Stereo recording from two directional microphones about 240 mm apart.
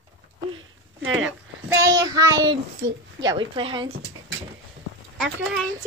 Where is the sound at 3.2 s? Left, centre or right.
Centre.